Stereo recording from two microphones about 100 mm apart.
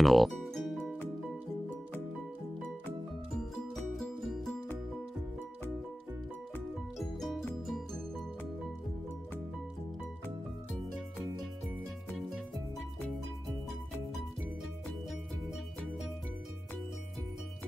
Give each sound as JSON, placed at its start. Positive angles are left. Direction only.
{"t": 0.0, "sound": "music", "side_deg": 0}
{"t": 3.7, "sound": "music", "side_deg": 0}
{"t": 7.0, "sound": "music", "side_deg": 5}
{"t": 12.1, "sound": "music", "side_deg": 0}